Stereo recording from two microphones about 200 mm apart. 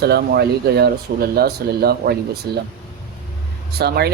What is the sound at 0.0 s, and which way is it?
Speech, 55° right (ahead or behind).